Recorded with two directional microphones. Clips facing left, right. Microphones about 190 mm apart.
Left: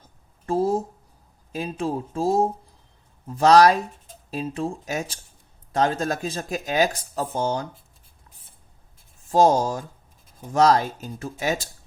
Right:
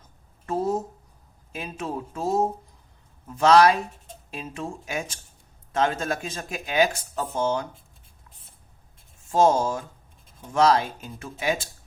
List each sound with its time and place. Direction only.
0.4 s speech: 30° left (ahead or behind)
9.3 s speech: 35° left (ahead or behind)